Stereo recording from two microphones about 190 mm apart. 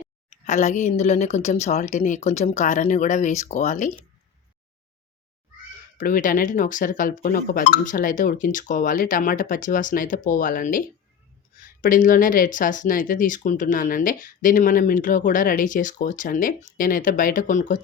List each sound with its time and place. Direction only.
0.0 s speech: 40° left (ahead or behind)
6.0 s speech: 45° left (ahead or behind)